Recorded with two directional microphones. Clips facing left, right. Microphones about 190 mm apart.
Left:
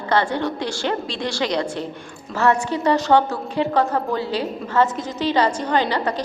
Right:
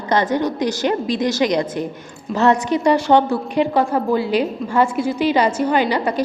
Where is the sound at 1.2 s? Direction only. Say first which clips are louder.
Right 6 dB; 40° right (ahead or behind).